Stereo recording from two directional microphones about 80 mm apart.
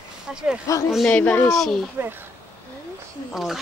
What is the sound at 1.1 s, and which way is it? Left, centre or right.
Speech, left.